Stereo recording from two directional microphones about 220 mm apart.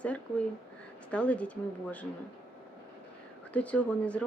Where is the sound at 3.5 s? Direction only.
5° left (ahead or behind).